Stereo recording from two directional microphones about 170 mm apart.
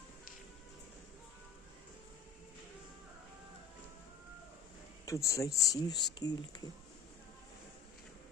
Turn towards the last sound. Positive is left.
turn(degrees=25)  # may be behind; listen again after turning